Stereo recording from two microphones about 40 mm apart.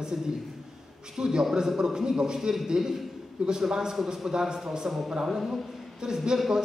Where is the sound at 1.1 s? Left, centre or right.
Centre.